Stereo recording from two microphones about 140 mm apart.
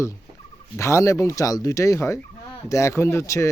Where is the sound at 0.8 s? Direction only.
20° left (ahead or behind).